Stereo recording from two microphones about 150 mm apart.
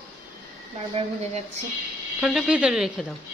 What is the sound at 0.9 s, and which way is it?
Speech, 45° right (ahead or behind).